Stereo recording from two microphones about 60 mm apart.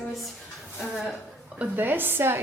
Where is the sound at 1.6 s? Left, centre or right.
Right.